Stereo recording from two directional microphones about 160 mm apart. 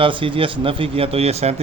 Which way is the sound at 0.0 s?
30° right (ahead or behind).